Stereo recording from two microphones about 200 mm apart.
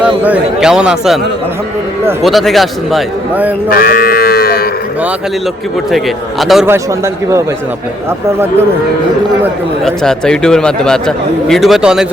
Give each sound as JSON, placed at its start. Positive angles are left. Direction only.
{"t": 0.0, "sound": "speech", "side_deg": -5}
{"t": 2.2, "sound": "speech", "side_deg": 0}
{"t": 3.7, "sound": "livestock", "side_deg": 45}
{"t": 6.4, "sound": "speech", "side_deg": 0}
{"t": 6.7, "sound": "speech", "side_deg": -15}
{"t": 9.8, "sound": "speech", "side_deg": 5}